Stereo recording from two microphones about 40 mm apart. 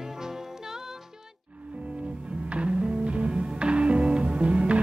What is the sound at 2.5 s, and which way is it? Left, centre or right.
Music, right.